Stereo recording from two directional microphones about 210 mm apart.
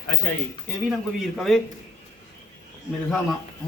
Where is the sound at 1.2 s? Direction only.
Centre (ahead or behind).